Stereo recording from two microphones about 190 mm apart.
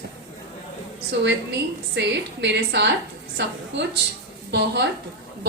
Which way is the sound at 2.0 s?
65° right (ahead or behind).